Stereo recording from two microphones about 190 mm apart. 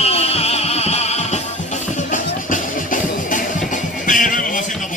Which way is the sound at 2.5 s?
45° left (ahead or behind).